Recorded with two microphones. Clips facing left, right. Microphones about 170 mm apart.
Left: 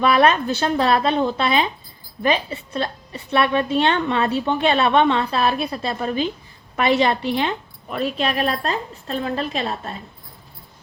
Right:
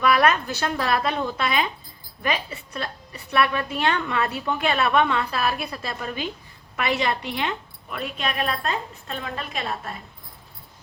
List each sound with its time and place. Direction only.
0.0 s a woman's voice: 30° left (ahead or behind)